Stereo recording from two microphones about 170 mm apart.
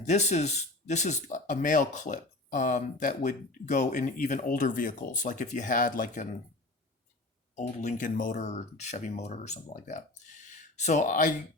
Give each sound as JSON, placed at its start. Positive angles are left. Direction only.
{"t": 0.0, "sound": "speech", "side_deg": 40}
{"t": 7.5, "sound": "speech", "side_deg": 45}